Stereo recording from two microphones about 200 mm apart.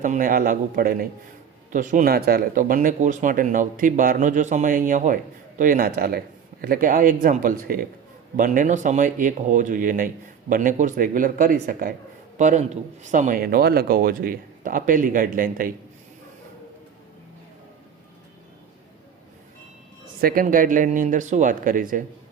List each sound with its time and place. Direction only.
0.0 s speech: 40° right (ahead or behind)
20.2 s speech: 45° right (ahead or behind)